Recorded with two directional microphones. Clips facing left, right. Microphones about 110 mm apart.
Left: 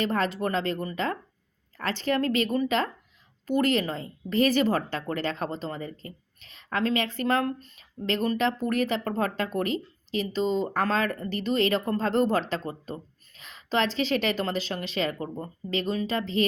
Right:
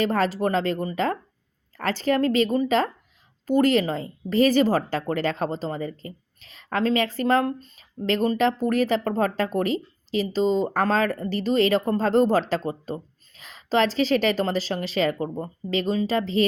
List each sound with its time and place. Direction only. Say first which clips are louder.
0.0 s a woman's voice: right 4 dB; 40° right (ahead or behind)